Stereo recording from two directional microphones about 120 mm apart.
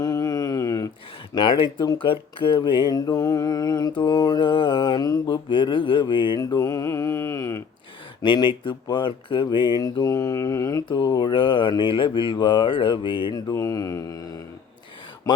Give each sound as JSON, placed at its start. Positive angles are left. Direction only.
{"t": 0.0, "sound": "mantra", "side_deg": 30}
{"t": 1.4, "sound": "speech", "side_deg": 40}
{"t": 2.6, "sound": "mantra", "side_deg": 40}
{"t": 8.2, "sound": "mantra", "side_deg": 40}
{"t": 10.8, "sound": "mantra", "side_deg": 35}
{"t": 13.5, "sound": "mantra", "side_deg": 25}